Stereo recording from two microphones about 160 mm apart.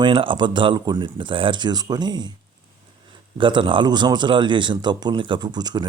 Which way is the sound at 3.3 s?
30° right (ahead or behind).